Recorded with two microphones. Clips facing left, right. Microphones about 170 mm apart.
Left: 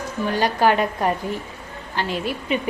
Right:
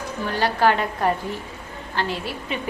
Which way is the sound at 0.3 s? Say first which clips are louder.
Left 1 dB; 15° left (ahead or behind).